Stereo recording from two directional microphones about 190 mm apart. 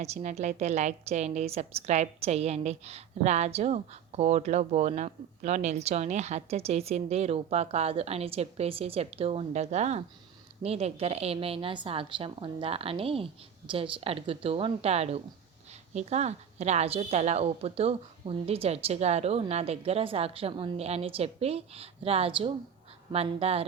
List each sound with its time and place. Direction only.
0.0 s a woman's voice: 35° right (ahead or behind)